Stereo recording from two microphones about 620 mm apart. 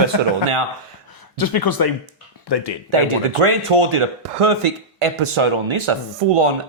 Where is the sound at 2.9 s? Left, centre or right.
Right.